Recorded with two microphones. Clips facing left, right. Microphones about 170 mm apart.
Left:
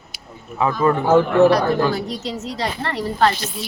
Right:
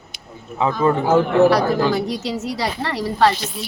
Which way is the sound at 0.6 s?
20° right (ahead or behind).